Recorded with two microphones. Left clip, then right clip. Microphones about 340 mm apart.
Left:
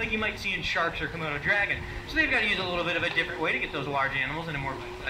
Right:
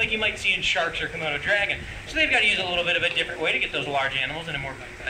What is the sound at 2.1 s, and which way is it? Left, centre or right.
Speech, right.